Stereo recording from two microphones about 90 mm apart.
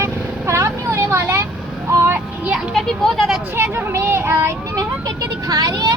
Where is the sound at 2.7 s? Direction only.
5° left (ahead or behind).